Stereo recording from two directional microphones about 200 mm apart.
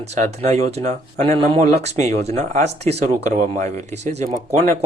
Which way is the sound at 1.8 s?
35° right (ahead or behind).